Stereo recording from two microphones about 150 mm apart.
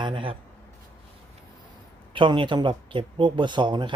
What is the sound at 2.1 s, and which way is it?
Speech, 35° right (ahead or behind).